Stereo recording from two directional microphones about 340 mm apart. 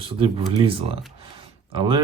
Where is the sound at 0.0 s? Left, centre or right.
Centre.